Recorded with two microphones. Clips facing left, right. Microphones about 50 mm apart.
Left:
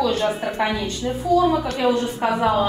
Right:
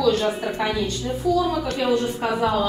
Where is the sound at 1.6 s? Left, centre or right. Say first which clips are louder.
Left 1 dB; centre.